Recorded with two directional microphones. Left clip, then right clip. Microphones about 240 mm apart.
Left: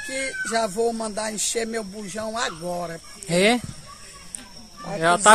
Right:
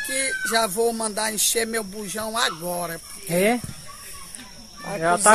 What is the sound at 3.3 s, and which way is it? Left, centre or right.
Speech, centre.